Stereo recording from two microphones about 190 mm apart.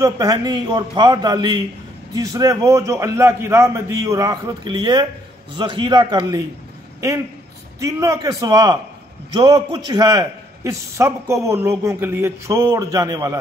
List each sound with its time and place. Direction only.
0.0 s a man's voice: 20° right (ahead or behind)
7.8 s a man's voice: 15° right (ahead or behind)